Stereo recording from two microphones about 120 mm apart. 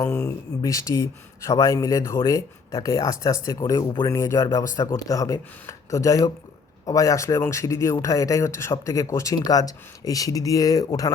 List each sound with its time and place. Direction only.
0.0 s speech: 25° left (ahead or behind)